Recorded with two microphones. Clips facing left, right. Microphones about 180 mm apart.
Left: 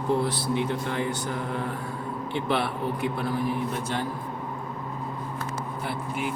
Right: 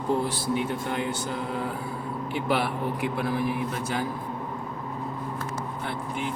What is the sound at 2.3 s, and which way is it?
Speech, 5° right (ahead or behind).